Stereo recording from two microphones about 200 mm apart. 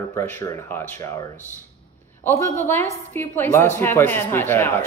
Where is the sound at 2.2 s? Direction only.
10° left (ahead or behind).